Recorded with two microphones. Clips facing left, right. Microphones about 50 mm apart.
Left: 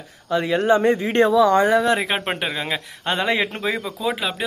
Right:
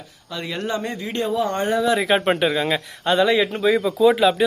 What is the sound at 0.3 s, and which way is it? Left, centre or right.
Speech, left.